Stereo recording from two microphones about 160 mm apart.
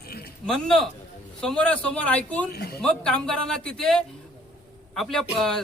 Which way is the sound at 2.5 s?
75° left (ahead or behind).